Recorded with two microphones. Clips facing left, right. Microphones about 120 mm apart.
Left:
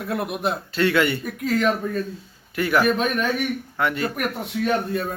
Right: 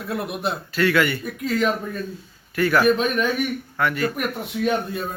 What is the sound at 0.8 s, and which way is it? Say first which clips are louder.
Speech: even; 25° left (ahead or behind).